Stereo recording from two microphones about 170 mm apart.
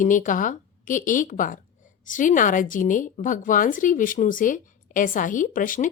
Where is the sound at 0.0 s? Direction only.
50° left (ahead or behind).